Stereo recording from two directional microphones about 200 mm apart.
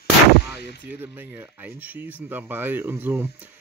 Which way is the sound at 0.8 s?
10° right (ahead or behind).